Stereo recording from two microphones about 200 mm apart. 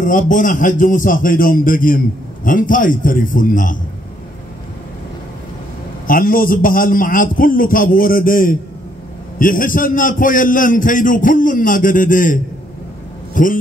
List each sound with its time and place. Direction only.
0.0 s a man's voice: 40° left (ahead or behind)
6.0 s a man's voice: 45° left (ahead or behind)